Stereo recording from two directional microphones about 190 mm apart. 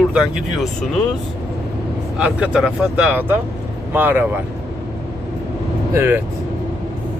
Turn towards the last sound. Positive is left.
turn(degrees=-10)  # may be behind; listen again after turning